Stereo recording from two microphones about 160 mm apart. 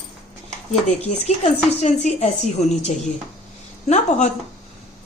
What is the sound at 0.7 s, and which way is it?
A woman's voice, 45° left (ahead or behind).